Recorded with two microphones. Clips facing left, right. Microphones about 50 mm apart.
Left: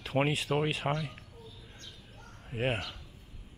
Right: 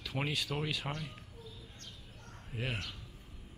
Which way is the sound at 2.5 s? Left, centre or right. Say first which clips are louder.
Left 7 dB; left.